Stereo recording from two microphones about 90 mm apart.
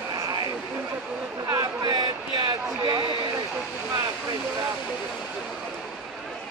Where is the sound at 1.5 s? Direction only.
45° right (ahead or behind).